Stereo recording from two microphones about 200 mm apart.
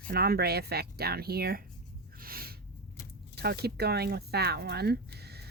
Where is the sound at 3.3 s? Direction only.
50° right (ahead or behind).